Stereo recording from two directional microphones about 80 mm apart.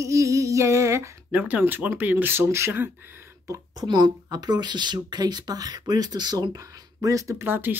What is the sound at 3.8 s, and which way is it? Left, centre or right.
Speech, right.